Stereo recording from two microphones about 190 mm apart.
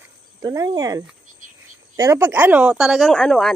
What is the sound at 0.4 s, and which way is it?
Speech, 20° right (ahead or behind).